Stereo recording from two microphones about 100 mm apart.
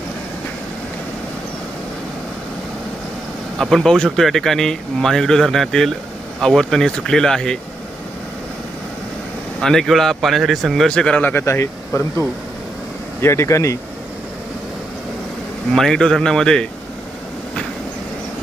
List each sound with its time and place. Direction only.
3.6 s speech: 5° left (ahead or behind)
9.6 s speech: 5° left (ahead or behind); by 12.0 s 25° left (ahead or behind)
13.2 s speech: 30° left (ahead or behind)
15.7 s speech: 5° left (ahead or behind)